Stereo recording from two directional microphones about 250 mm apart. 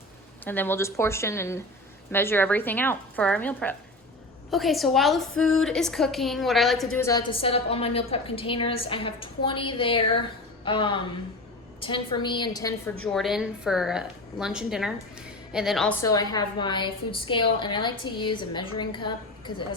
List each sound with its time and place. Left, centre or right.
0.4 s a woman's voice: centre
7.0 s a woman's voice: centre
13.1 s a woman's voice: centre